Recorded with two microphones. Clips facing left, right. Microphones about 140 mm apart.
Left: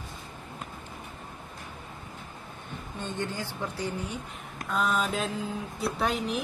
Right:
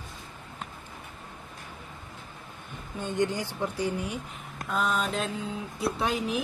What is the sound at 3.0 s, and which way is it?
A woman's voice, 15° right (ahead or behind).